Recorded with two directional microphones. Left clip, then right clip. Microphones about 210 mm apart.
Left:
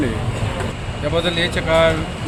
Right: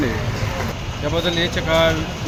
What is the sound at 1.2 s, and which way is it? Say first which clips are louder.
Speech: left 1 dB; 5° left (ahead or behind).